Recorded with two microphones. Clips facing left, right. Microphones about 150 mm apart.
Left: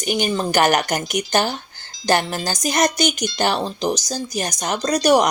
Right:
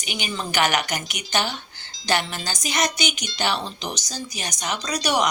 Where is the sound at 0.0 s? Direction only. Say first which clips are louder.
Left 9 dB; 45° left (ahead or behind).